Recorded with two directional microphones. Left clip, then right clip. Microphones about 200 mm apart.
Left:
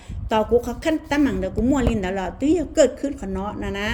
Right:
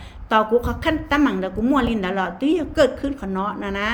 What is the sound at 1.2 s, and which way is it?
A woman's voice, 45° left (ahead or behind).